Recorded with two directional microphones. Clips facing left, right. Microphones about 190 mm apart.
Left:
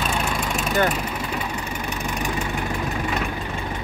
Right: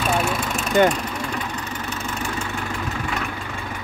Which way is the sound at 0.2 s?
Centre (ahead or behind).